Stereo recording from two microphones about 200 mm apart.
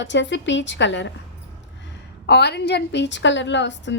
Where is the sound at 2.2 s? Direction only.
55° left (ahead or behind).